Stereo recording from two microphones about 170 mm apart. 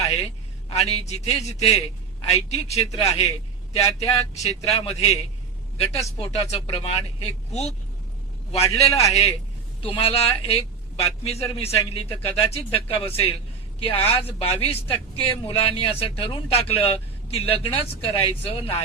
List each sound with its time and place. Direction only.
0.7 s a man's voice: 40° left (ahead or behind)
8.9 s a man's voice: 20° left (ahead or behind)
9.8 s a man's voice: 35° left (ahead or behind)
14.3 s a man's voice: 35° left (ahead or behind)